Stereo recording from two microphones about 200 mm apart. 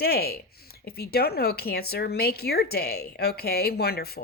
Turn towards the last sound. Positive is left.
turn(degrees=50)  # may be behind; listen again after turning